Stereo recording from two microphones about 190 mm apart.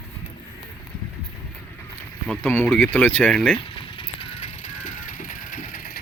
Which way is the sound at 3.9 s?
30° left (ahead or behind).